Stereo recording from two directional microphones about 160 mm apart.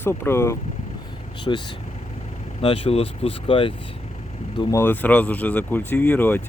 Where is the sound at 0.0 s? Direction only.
15° left (ahead or behind).